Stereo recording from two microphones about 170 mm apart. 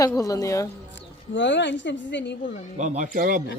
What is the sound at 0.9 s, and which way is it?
A woman's voice, 90° left.